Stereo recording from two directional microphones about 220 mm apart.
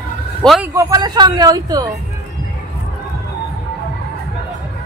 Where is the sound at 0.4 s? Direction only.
Centre (ahead or behind).